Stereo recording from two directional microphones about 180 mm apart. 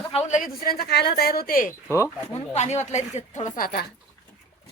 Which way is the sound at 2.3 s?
40° left (ahead or behind).